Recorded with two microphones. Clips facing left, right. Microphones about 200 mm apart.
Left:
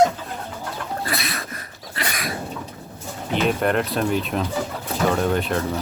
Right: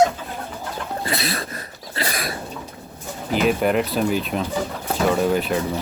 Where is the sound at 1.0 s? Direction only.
25° right (ahead or behind).